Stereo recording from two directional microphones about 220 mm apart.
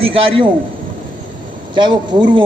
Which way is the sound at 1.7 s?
20° right (ahead or behind).